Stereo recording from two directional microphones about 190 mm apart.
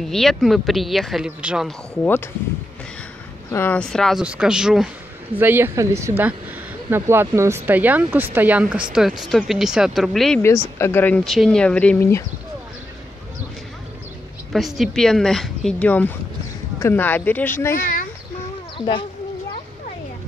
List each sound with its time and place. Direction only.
0.1 s speech: centre (ahead or behind)
3.5 s speech: 10° left (ahead or behind)
14.5 s speech: centre (ahead or behind)
17.7 s speech: 50° left (ahead or behind)
18.8 s speech: 25° left (ahead or behind)